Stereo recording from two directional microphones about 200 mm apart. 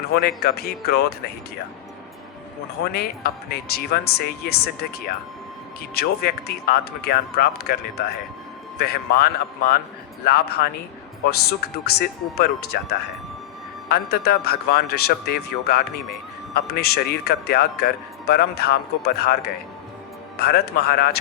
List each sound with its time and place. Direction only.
0.1 s speech: 50° left (ahead or behind)
2.8 s speech: 50° left (ahead or behind)